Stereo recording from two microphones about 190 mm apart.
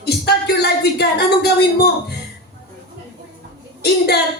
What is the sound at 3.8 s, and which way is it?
Speech, 60° left (ahead or behind).